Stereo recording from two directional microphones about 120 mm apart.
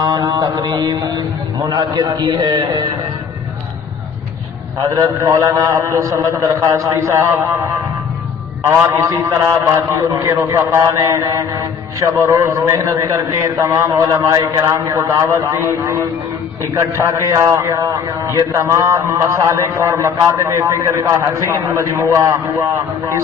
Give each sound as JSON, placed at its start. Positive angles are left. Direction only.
{"t": 0.0, "sound": "mantra", "side_deg": -35}
{"t": 1.7, "sound": "a man's voice", "side_deg": -30}
{"t": 4.8, "sound": "a man's voice", "side_deg": -25}
{"t": 8.9, "sound": "a man's voice", "side_deg": -25}